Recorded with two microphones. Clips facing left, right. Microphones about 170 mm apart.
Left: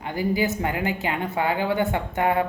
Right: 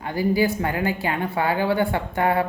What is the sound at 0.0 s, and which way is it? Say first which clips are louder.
Speech: right 3 dB; 20° left (ahead or behind).